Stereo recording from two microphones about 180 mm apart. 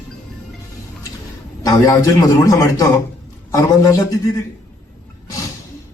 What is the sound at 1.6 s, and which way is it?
A man's voice, 20° left (ahead or behind).